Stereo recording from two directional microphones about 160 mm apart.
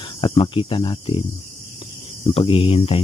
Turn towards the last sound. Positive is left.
turn(degrees=35)  # may be behind; listen again after turning